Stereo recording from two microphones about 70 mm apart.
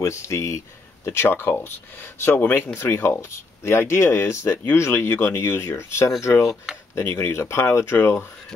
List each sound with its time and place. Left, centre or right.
0.0 s speech: left
1.0 s speech: left
6.4 s speech: centre
7.0 s speech: left